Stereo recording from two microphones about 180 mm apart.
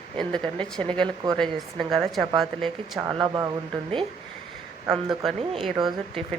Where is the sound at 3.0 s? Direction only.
25° right (ahead or behind).